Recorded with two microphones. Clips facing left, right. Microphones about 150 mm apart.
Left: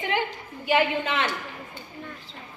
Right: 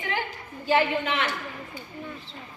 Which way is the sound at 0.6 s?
15° left (ahead or behind).